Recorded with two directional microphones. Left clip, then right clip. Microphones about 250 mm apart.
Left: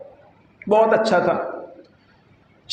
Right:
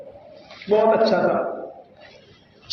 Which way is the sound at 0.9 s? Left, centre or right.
Left.